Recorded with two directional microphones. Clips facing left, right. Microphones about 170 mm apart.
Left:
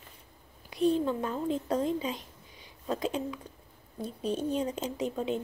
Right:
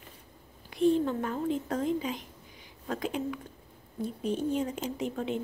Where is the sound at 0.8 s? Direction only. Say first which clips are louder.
Right 2 dB; 20° right (ahead or behind).